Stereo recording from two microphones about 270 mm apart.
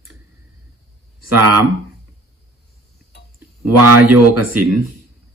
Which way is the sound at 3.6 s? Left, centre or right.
Right.